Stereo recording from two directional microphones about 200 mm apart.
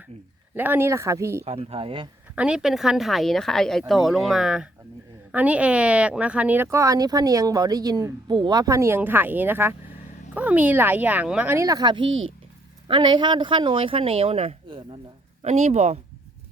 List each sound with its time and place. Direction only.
0.5 s speech: 10° right (ahead or behind)
1.5 s speech: 30° right (ahead or behind)
2.3 s speech: 5° right (ahead or behind); by 12.0 s 20° right (ahead or behind)
12.0 s speech: 80° right
12.9 s speech: 25° right (ahead or behind)